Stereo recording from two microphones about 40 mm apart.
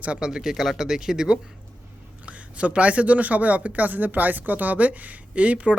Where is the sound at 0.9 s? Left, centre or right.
Centre.